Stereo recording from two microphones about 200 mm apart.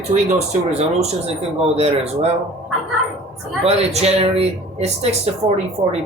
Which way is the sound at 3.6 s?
30° right (ahead or behind).